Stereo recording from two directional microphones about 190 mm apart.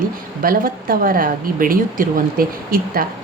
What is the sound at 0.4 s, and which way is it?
A woman's voice, 50° right (ahead or behind).